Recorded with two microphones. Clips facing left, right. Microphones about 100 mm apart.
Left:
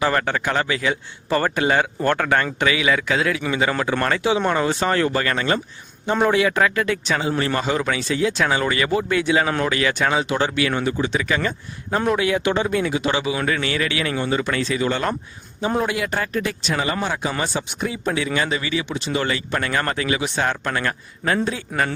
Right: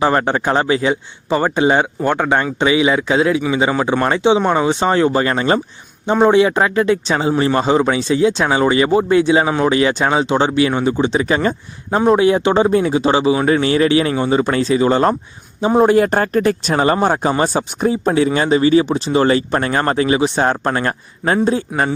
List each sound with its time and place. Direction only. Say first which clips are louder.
0.0 s a man's voice: right 5 dB; 25° right (ahead or behind)
1.3 s a man's voice: right 5 dB; 15° right (ahead or behind)